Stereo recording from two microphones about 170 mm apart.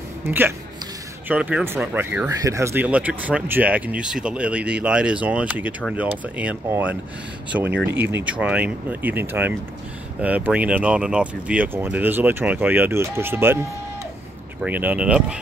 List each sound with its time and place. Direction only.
0.2 s speech: 15° right (ahead or behind)
7.7 s speech: 90° right
8.0 s speech: 10° right (ahead or behind)
14.6 s speech: 10° right (ahead or behind)